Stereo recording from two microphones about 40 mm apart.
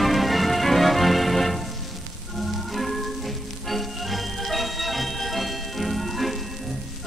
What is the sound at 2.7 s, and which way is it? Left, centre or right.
Music, centre.